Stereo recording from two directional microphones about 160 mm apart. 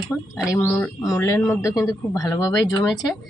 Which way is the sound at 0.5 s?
10° left (ahead or behind).